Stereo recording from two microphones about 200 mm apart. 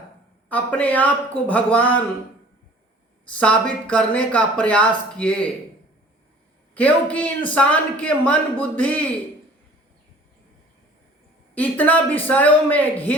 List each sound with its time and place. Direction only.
0.4 s speech: 5° left (ahead or behind)
3.3 s speech: 5° left (ahead or behind)
6.7 s speech: 5° left (ahead or behind)
11.5 s speech: 10° left (ahead or behind)